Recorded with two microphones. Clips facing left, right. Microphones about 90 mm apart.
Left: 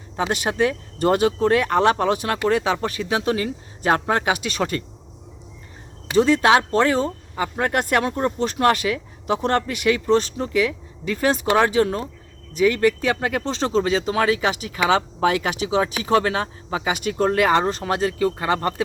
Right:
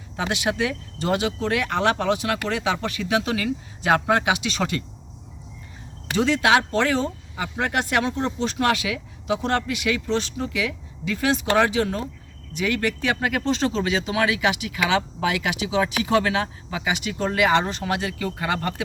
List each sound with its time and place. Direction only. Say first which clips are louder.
0.2 s speech: left 3 dB; 45° left (ahead or behind)
6.1 s speech: left 3 dB; 40° left (ahead or behind)